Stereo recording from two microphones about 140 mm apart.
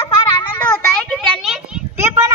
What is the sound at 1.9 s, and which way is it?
Speech, 15° right (ahead or behind).